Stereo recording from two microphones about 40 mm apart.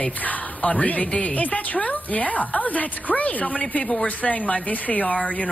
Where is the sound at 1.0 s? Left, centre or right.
Left.